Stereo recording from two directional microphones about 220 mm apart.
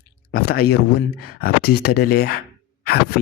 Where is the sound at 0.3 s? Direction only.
45° left (ahead or behind).